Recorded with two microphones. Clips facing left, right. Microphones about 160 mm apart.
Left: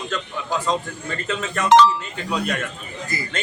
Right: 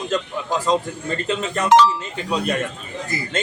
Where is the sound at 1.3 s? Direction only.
25° right (ahead or behind).